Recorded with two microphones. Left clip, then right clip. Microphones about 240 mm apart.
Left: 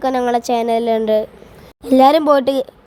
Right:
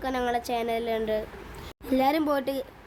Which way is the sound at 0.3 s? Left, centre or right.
Left.